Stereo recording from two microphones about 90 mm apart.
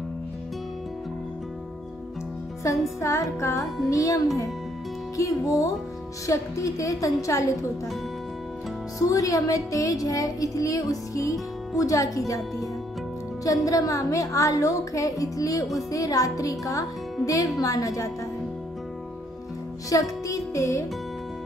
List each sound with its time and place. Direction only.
2.6 s speech: 35° left (ahead or behind)
9.1 s speech: 40° left (ahead or behind)
13.4 s speech: 40° left (ahead or behind)
19.9 s speech: 40° left (ahead or behind)